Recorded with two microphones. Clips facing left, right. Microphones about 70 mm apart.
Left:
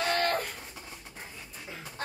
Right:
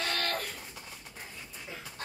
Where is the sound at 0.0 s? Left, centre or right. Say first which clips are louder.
Left 5 dB; centre.